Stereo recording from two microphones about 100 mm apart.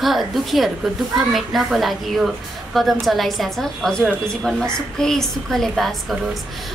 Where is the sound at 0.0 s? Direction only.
Centre (ahead or behind).